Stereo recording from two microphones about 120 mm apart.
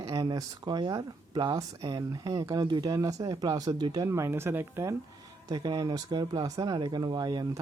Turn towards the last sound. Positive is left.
turn(degrees=-35)  # may be behind; listen again after turning